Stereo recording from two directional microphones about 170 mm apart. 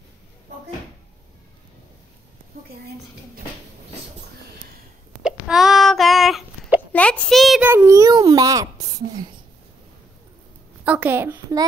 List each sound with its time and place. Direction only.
5.2 s hiccup: 5° right (ahead or behind)
6.9 s a child's voice: 5° left (ahead or behind)
7.6 s a child's voice: 15° right (ahead or behind)
10.9 s a woman's voice: 10° right (ahead or behind)